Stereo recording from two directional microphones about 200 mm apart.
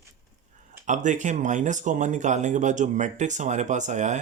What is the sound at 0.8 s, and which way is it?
Speech, 40° right (ahead or behind).